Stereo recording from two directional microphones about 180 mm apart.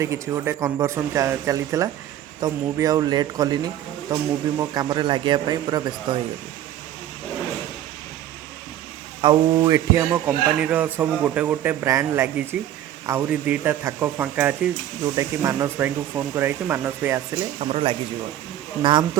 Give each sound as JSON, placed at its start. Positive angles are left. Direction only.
{"t": 0.0, "sound": "speech", "side_deg": -15}
{"t": 9.2, "sound": "speech", "side_deg": -20}
{"t": 17.6, "sound": "speech", "side_deg": -30}